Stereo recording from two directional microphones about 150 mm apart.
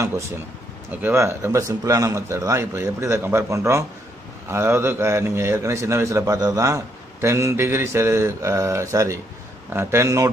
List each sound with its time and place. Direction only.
1.0 s a man's voice: 15° right (ahead or behind)